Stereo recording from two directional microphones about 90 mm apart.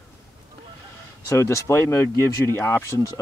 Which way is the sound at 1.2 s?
35° left (ahead or behind).